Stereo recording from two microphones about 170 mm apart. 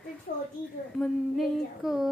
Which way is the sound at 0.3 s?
55° left (ahead or behind).